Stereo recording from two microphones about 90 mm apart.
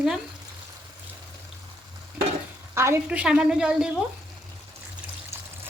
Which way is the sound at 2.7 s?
30° right (ahead or behind).